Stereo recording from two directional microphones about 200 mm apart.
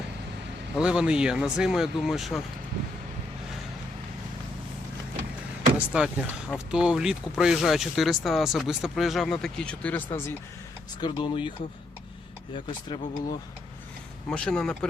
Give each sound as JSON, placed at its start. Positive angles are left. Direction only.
{"t": 0.8, "sound": "speech", "side_deg": -5}
{"t": 5.7, "sound": "speech", "side_deg": -5}
{"t": 11.0, "sound": "speech", "side_deg": 25}
{"t": 12.5, "sound": "speech", "side_deg": 25}
{"t": 14.3, "sound": "speech", "side_deg": 5}